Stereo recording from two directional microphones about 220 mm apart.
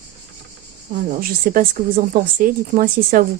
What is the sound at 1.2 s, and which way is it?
Speech, 40° right (ahead or behind).